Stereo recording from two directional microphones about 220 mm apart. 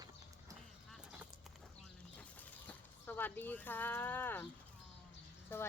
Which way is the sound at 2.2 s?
5° left (ahead or behind).